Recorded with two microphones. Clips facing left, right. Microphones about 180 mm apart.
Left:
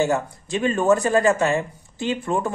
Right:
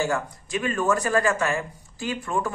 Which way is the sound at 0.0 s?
25° left (ahead or behind).